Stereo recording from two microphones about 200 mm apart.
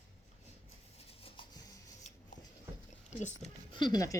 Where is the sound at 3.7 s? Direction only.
20° left (ahead or behind).